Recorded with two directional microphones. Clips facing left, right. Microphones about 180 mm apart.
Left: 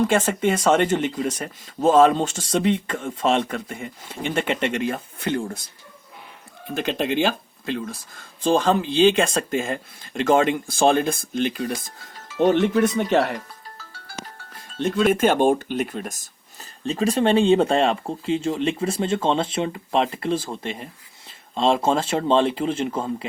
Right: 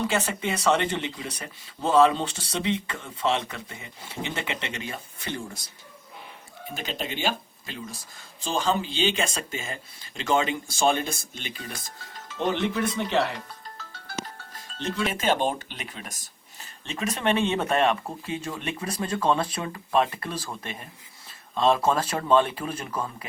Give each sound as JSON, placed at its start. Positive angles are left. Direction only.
{"t": 0.0, "sound": "speech", "side_deg": 50}
{"t": 6.7, "sound": "speech", "side_deg": 60}
{"t": 13.7, "sound": "music", "side_deg": 10}
{"t": 14.8, "sound": "speech", "side_deg": 55}
{"t": 16.8, "sound": "speech", "side_deg": 35}